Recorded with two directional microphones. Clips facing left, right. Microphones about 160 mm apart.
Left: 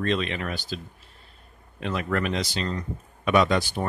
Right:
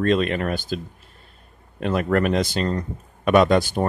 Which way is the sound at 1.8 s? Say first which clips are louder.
Right 6 dB; 50° right (ahead or behind).